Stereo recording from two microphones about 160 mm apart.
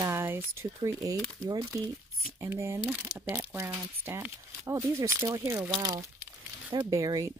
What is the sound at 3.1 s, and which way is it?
Speech, 20° right (ahead or behind).